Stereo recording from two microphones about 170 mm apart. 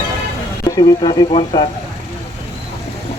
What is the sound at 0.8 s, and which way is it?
Speech, 30° left (ahead or behind).